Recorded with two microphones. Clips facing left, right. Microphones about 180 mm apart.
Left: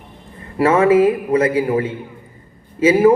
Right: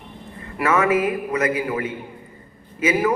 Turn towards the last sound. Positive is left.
turn(degrees=30)  # may be behind; listen again after turning